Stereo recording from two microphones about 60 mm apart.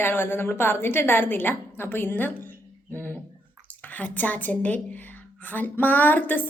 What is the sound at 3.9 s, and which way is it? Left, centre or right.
A woman's voice, left.